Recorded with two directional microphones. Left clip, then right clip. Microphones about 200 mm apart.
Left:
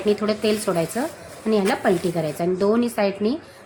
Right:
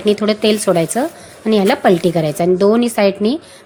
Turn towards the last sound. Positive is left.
turn(degrees=-40)  # may be behind; listen again after turning